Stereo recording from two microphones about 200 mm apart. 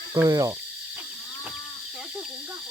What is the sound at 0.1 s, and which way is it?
Speech, 15° right (ahead or behind).